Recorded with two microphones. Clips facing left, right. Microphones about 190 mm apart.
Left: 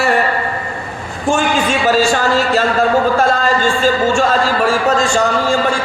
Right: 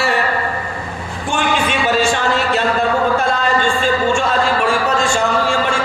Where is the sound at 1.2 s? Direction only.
40° left (ahead or behind).